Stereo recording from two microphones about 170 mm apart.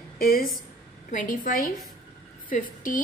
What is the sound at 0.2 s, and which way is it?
A woman's voice, 55° left (ahead or behind).